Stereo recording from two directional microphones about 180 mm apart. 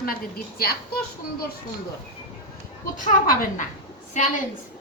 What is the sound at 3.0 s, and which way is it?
Speech, 50° left (ahead or behind).